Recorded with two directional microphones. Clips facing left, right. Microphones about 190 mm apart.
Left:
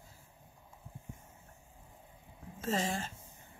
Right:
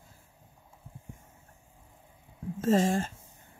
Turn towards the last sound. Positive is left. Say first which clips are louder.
# right 9 dB
turn(degrees=-45)  # may be behind; listen again after turning